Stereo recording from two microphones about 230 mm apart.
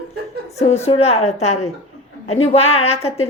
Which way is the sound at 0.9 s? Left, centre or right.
Left.